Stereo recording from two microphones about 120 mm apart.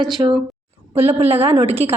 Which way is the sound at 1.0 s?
55° right (ahead or behind).